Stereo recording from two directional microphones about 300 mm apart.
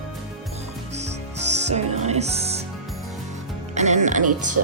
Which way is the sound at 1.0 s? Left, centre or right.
Right.